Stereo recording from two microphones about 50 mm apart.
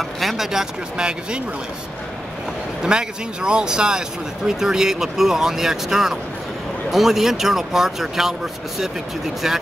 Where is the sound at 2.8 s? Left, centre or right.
Centre.